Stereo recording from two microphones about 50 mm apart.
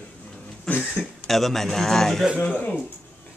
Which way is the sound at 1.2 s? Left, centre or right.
Centre.